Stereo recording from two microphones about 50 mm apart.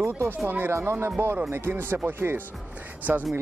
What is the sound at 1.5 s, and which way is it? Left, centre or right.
Speech, right.